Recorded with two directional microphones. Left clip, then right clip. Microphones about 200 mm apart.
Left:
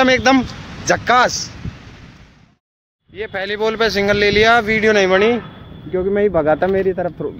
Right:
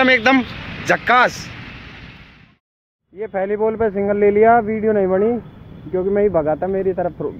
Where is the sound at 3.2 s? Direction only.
20° left (ahead or behind).